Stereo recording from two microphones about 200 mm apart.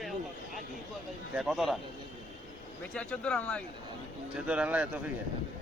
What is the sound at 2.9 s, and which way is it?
Speech, 5° left (ahead or behind).